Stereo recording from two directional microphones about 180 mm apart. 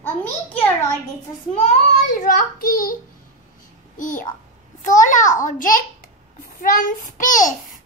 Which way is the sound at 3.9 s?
45° left (ahead or behind).